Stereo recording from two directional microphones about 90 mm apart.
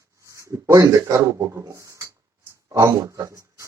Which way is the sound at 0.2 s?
35° right (ahead or behind).